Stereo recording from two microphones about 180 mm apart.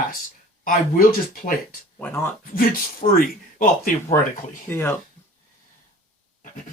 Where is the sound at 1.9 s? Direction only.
10° left (ahead or behind).